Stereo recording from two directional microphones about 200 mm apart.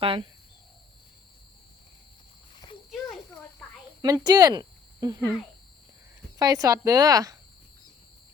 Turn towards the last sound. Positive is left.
turn(degrees=-15)  # may be behind; listen again after turning